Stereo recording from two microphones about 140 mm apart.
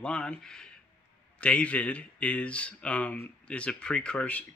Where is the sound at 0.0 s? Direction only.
5° left (ahead or behind).